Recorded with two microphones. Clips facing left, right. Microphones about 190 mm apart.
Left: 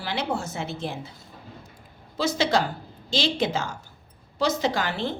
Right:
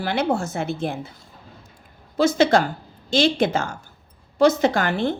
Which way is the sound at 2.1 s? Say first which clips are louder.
Right 6 dB; 50° right (ahead or behind).